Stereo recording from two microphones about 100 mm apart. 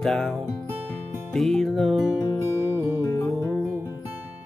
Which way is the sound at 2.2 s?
30° right (ahead or behind).